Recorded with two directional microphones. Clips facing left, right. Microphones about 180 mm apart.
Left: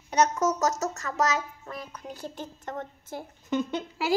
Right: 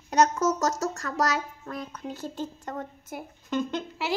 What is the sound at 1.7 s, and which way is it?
Speech, 15° left (ahead or behind).